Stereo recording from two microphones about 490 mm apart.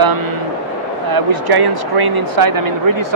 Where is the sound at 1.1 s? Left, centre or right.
Right.